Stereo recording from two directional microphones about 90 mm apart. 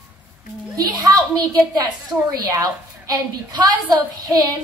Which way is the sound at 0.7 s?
45° right (ahead or behind).